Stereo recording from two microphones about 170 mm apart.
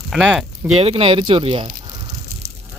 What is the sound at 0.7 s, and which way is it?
Speech, 35° right (ahead or behind).